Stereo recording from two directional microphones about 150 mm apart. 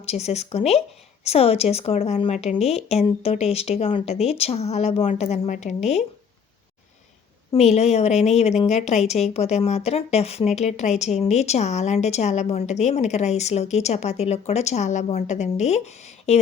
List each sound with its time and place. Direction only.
0.0 s a woman's voice: 45° left (ahead or behind)
7.5 s a woman's voice: 45° left (ahead or behind)